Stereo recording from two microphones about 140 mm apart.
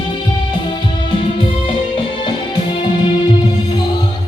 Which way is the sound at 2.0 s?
35° left (ahead or behind).